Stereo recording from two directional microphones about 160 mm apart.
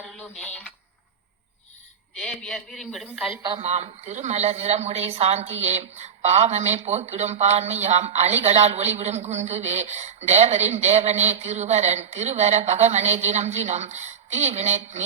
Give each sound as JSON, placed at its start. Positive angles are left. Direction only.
{"t": 0.1, "sound": "a sound", "side_deg": 5}
{"t": 2.1, "sound": "a woman's voice", "side_deg": 5}
{"t": 3.4, "sound": "a man's voice", "side_deg": -35}